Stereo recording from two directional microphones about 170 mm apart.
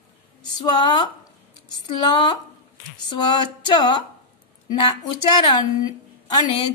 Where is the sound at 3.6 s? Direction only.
25° left (ahead or behind).